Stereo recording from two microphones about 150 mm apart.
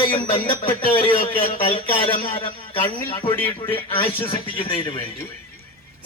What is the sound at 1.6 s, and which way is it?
Speech, 40° left (ahead or behind).